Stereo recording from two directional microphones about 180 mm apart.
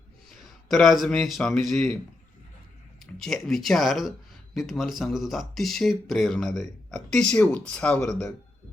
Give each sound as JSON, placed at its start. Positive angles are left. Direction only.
{"t": 0.3, "sound": "speech", "side_deg": 0}
{"t": 3.2, "sound": "speech", "side_deg": 0}